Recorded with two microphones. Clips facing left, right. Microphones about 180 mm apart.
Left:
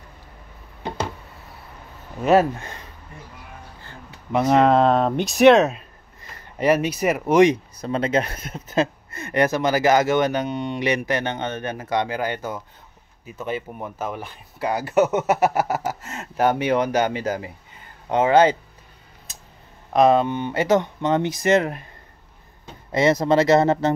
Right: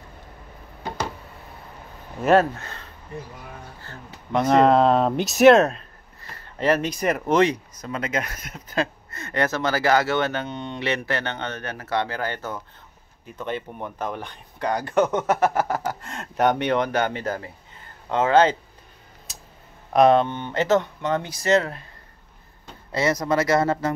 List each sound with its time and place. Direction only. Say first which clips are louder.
2.2 s speech: left 1 dB; 10° left (ahead or behind)
3.8 s a sound: right 1 dB; 15° left (ahead or behind)
4.4 s speech: even; 5° left (ahead or behind)
6.2 s speech: left 2 dB; 15° left (ahead or behind)
7.5 s speech: left 6 dB; 30° left (ahead or behind); by 18.6 s 10° left (ahead or behind)
19.9 s speech: even; centre (ahead or behind); by 21.8 s 15° left (ahead or behind)
22.8 s speech: left 4 dB; 20° left (ahead or behind)